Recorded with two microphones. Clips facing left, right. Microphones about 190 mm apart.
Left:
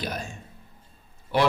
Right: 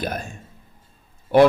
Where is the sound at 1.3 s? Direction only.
50° right (ahead or behind).